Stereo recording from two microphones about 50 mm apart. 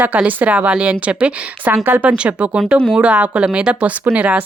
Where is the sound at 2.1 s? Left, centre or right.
Right.